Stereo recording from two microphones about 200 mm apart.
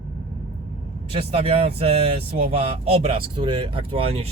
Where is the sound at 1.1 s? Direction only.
30° right (ahead or behind).